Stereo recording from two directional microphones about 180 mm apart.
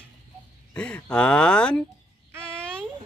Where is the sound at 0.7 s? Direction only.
5° left (ahead or behind).